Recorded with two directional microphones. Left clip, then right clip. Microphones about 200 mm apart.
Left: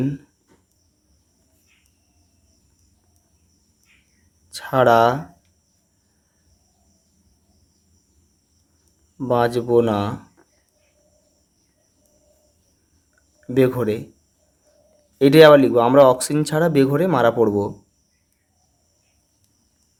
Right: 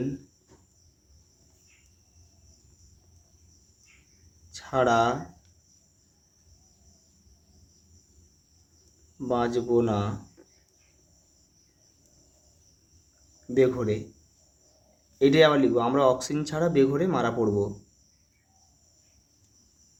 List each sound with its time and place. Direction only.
4.5 s speech: 45° left (ahead or behind)
9.1 s speech: 40° left (ahead or behind)
13.5 s speech: 45° left (ahead or behind)
15.2 s speech: 45° left (ahead or behind)